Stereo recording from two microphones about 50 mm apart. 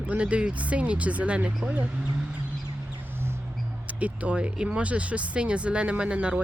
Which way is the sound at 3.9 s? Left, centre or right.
Right.